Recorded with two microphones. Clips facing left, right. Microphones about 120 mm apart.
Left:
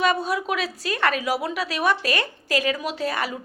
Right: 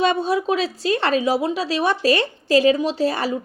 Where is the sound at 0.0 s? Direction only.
30° right (ahead or behind).